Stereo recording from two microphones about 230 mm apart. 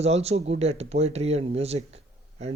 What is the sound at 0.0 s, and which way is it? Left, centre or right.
Speech, right.